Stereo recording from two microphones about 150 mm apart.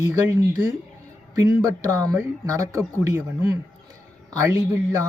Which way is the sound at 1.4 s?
20° right (ahead or behind).